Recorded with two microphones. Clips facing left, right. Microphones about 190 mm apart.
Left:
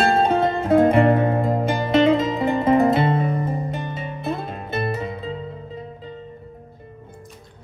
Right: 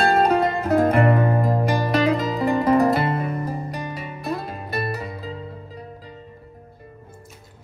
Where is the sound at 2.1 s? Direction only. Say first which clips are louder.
Left 1 dB; 25° left (ahead or behind).